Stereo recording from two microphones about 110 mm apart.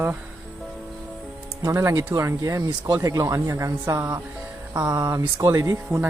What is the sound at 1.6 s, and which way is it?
Speech, 30° right (ahead or behind).